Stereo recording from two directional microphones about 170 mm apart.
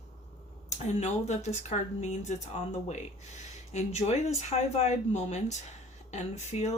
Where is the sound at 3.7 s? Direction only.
40° left (ahead or behind).